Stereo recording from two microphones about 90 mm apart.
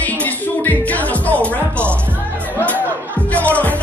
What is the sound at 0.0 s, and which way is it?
Music, 15° left (ahead or behind).